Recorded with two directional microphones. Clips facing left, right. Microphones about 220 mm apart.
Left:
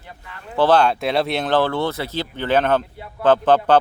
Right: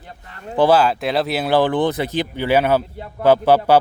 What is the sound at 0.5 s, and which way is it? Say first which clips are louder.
Speech: right 1 dB; 10° right (ahead or behind).